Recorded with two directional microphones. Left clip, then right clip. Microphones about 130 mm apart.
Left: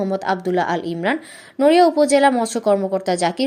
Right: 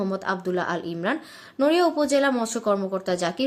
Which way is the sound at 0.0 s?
30° left (ahead or behind).